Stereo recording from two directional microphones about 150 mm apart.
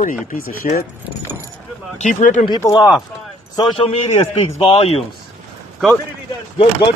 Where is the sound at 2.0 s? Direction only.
50° left (ahead or behind).